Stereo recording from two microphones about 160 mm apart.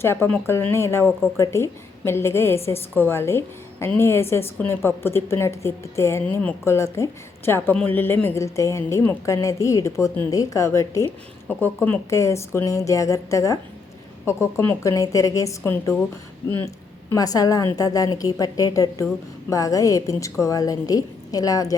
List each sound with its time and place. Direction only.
0.0 s a woman's voice: 15° left (ahead or behind)
17.1 s a woman's voice: 20° left (ahead or behind)